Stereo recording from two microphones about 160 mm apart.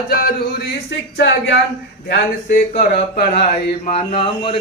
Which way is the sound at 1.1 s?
90° left.